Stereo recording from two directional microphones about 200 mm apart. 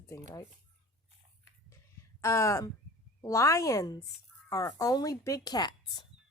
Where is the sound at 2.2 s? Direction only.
15° left (ahead or behind).